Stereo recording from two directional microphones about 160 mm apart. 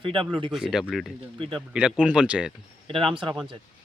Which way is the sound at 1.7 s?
5° right (ahead or behind).